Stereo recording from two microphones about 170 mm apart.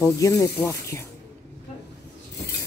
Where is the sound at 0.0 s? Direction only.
20° left (ahead or behind).